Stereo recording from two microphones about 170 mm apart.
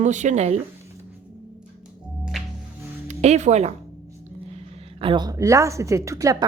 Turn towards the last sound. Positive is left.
turn(degrees=-20)  # may be behind; listen again after turning